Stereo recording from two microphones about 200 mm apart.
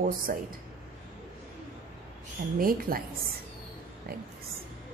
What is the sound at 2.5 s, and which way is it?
Speech, 45° right (ahead or behind).